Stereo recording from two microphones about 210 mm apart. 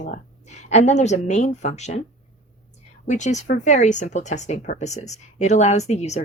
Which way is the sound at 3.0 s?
35° left (ahead or behind).